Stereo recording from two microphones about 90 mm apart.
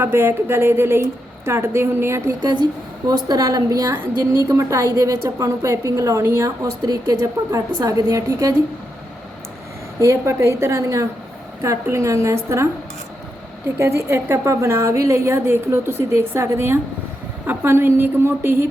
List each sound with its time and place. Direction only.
0.0 s a woman's voice: 25° right (ahead or behind)
2.4 s a woman's voice: 55° right (ahead or behind); by 8.5 s 35° right (ahead or behind)
10.0 s a woman's voice: 35° right (ahead or behind)
13.7 s a woman's voice: 30° right (ahead or behind)